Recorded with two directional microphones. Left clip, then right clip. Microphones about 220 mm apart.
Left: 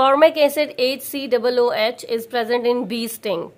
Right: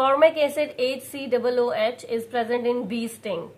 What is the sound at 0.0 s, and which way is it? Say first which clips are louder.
A woman's voice: left 4 dB; 45° left (ahead or behind).